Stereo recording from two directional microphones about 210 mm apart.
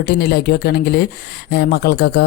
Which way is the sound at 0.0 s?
50° left (ahead or behind).